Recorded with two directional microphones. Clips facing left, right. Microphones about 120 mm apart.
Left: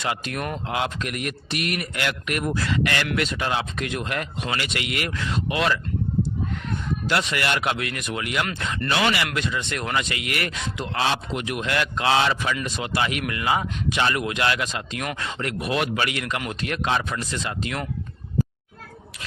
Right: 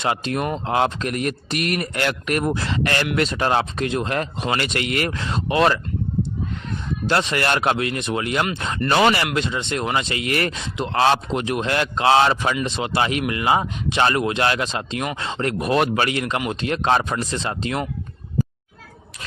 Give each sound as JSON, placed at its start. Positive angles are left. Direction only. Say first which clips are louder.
{"t": 0.0, "sound": "speech", "louder": "right 5 dB", "side_deg": -30}
{"t": 2.5, "sound": "speech", "louder": "right 2 dB", "side_deg": -25}
{"t": 4.5, "sound": "speech", "louder": "right 6 dB", "side_deg": -45}
{"t": 7.1, "sound": "speech", "louder": "right 4 dB", "side_deg": -30}
{"t": 8.9, "sound": "speech", "louder": "right 6 dB", "side_deg": -40}
{"t": 9.2, "sound": "speech", "louder": "right 3 dB", "side_deg": -25}
{"t": 11.0, "sound": "speech", "louder": "right 7 dB", "side_deg": -40}
{"t": 12.6, "sound": "speech", "louder": "right 4 dB", "side_deg": -25}
{"t": 16.9, "sound": "speech", "louder": "right 7 dB", "side_deg": -35}